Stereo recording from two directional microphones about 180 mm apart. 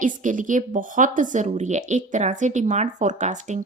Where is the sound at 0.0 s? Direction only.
45° right (ahead or behind).